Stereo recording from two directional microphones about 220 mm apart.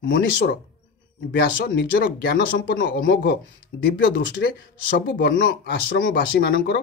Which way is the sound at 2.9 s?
40° left (ahead or behind).